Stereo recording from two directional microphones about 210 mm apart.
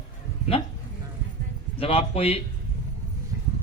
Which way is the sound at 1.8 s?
25° left (ahead or behind).